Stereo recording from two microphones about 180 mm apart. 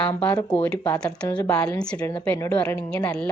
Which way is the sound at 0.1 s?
10° left (ahead or behind).